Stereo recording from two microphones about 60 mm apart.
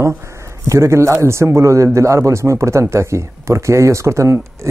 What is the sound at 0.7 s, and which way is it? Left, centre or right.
Speech, right.